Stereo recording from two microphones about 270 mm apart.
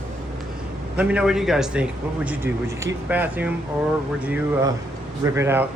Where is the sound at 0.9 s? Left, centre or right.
Centre.